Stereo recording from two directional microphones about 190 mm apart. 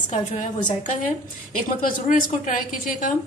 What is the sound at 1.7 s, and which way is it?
A woman's voice, 45° left (ahead or behind).